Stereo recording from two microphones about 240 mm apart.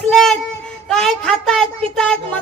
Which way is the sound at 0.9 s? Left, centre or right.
Centre.